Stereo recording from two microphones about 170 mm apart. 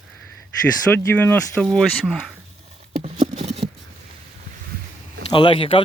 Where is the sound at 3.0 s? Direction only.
40° right (ahead or behind).